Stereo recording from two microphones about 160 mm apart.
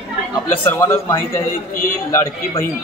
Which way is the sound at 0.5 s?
15° left (ahead or behind).